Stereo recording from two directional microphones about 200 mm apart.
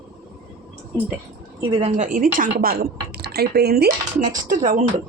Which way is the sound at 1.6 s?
30° right (ahead or behind).